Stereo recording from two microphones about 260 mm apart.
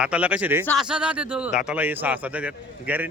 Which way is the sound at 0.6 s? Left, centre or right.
Centre.